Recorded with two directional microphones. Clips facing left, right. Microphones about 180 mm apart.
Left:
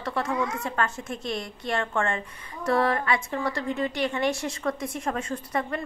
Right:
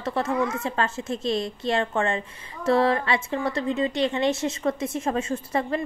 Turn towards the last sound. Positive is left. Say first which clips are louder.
# right 3 dB
turn(degrees=-25)  # may be behind; listen again after turning